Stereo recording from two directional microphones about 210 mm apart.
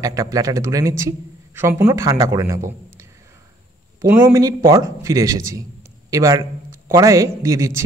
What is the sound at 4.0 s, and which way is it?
A man's voice, 10° right (ahead or behind).